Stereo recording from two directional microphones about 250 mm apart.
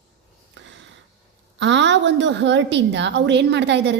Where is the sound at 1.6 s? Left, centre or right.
Right.